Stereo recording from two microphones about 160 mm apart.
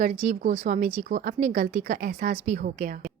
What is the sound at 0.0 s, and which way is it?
A woman's voice, 50° right (ahead or behind).